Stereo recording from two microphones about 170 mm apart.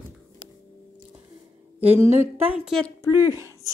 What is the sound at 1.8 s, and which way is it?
Speech, 10° right (ahead or behind).